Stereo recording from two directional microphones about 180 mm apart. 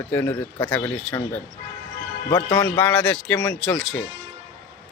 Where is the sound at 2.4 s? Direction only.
25° left (ahead or behind).